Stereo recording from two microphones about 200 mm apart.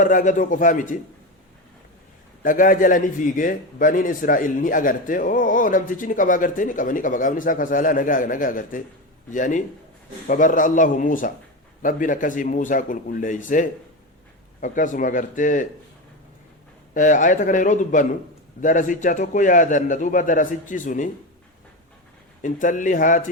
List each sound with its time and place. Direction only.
0.0 s a man's voice: 40° left (ahead or behind)
2.4 s a man's voice: 45° left (ahead or behind)
16.9 s a man's voice: 40° left (ahead or behind)
22.4 s a man's voice: 40° left (ahead or behind)